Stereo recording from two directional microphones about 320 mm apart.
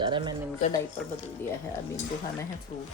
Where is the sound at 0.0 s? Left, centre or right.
Centre.